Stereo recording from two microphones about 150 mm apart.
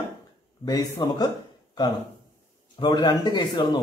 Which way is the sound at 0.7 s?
25° left (ahead or behind).